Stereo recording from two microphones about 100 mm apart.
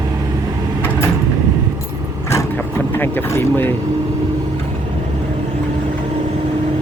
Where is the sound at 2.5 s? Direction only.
20° left (ahead or behind).